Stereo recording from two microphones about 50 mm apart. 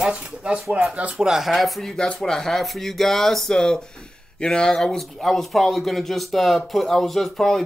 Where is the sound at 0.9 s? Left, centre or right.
Right.